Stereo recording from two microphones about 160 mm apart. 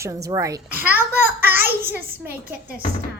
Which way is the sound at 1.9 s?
10° right (ahead or behind).